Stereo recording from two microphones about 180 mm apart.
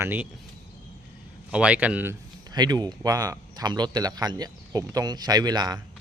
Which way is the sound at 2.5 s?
20° right (ahead or behind).